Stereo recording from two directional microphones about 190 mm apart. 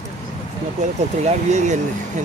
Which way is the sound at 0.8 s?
35° right (ahead or behind).